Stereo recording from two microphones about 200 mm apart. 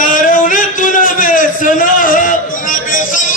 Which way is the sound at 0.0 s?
40° left (ahead or behind).